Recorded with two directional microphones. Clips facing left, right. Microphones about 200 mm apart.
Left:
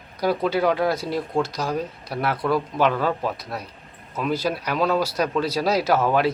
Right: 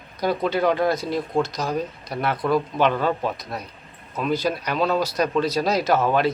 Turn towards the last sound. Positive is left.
turn(degrees=10)  # may be behind; listen again after turning